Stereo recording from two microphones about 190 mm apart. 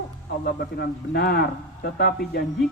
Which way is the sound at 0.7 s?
60° left (ahead or behind).